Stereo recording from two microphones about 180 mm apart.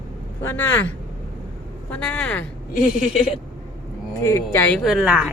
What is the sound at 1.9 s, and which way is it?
Speech, 5° left (ahead or behind).